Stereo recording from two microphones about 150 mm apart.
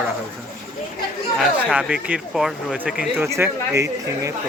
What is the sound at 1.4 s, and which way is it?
Speech, 5° right (ahead or behind).